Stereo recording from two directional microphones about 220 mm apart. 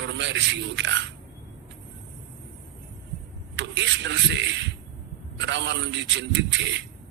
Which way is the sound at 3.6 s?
55° right (ahead or behind).